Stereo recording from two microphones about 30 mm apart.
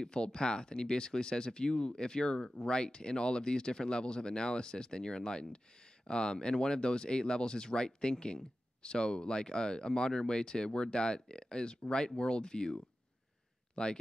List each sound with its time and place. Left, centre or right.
0.0 s speech: left